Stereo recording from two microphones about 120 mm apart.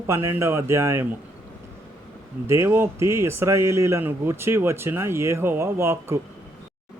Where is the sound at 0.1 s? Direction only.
20° right (ahead or behind).